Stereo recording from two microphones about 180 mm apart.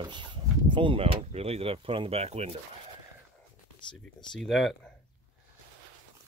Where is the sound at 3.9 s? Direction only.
Centre (ahead or behind).